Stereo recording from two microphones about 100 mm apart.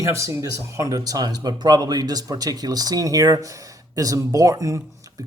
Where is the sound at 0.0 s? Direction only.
30° right (ahead or behind).